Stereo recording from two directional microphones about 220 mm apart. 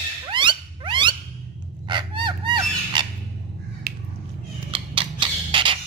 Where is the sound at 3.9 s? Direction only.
45° right (ahead or behind).